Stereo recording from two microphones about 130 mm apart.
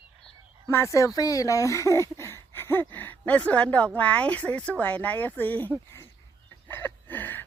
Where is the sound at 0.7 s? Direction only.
20° left (ahead or behind).